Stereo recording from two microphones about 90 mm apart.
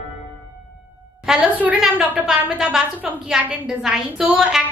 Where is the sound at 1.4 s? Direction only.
15° right (ahead or behind).